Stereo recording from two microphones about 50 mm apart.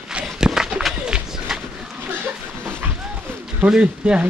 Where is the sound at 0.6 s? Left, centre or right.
Centre.